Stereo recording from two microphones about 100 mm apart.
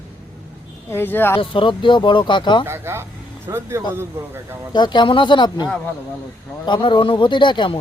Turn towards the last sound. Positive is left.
turn(degrees=50)  # may be behind; listen again after turning